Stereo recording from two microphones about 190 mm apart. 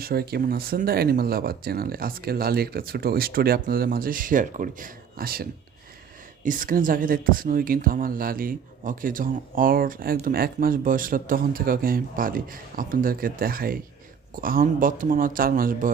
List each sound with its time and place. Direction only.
0.0 s speech: 55° right (ahead or behind)